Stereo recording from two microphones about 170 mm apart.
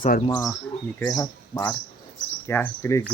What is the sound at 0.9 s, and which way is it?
Speech, 20° left (ahead or behind).